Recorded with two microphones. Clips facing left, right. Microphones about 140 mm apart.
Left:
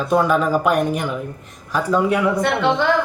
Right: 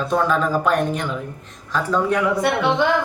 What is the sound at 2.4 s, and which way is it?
Speech, 10° right (ahead or behind).